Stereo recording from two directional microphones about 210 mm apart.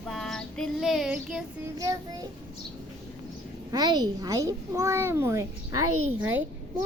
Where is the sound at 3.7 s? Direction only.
20° right (ahead or behind).